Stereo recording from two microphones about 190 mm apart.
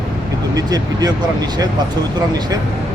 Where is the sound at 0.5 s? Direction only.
20° right (ahead or behind).